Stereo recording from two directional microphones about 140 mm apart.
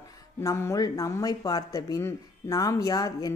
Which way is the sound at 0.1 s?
25° left (ahead or behind).